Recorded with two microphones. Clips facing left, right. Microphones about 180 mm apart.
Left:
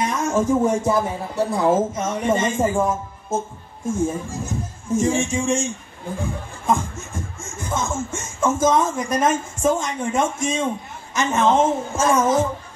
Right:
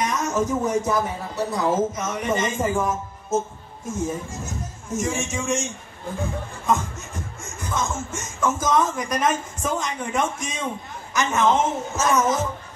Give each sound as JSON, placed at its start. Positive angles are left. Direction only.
{"t": 0.0, "sound": "speech", "side_deg": 30}
{"t": 7.3, "sound": "speech", "side_deg": 25}